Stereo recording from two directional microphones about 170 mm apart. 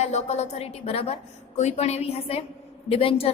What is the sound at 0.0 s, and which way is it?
A woman's voice, 40° left (ahead or behind).